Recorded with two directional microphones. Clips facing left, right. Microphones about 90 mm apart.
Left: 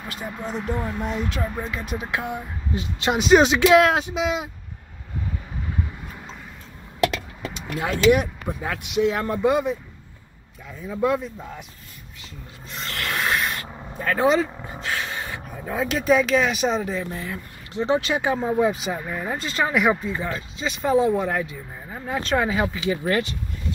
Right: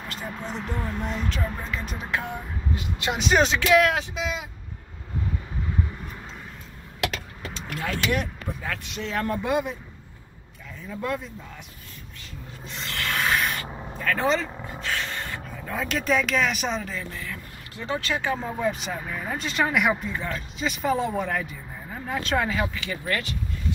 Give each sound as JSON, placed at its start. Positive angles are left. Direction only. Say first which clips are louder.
{"t": 0.1, "sound": "speech", "louder": "left 4 dB", "side_deg": 10}
{"t": 2.7, "sound": "speech", "louder": "left 5 dB", "side_deg": 25}
{"t": 3.2, "sound": "speech", "louder": "left 6 dB", "side_deg": 5}
{"t": 3.5, "sound": "speech", "louder": "left 4 dB", "side_deg": 25}
{"t": 7.5, "sound": "speech", "louder": "left 4 dB", "side_deg": 15}
{"t": 10.9, "sound": "speech", "louder": "left 7 dB", "side_deg": 10}
{"t": 12.6, "sound": "sanding", "louder": "left 1 dB", "side_deg": 0}
{"t": 14.1, "sound": "a sound", "louder": "left 5 dB", "side_deg": 10}
{"t": 16.8, "sound": "speech", "louder": "left 6 dB", "side_deg": 20}
{"t": 22.8, "sound": "speech", "louder": "left 6 dB", "side_deg": 20}